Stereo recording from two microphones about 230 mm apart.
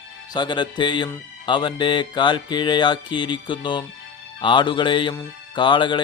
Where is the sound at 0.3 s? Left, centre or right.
Centre.